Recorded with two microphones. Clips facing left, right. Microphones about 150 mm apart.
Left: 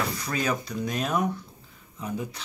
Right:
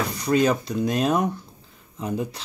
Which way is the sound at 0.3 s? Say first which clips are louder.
Right 12 dB; 30° right (ahead or behind).